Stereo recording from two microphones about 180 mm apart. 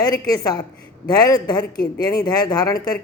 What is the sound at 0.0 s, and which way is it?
Speech, 20° left (ahead or behind).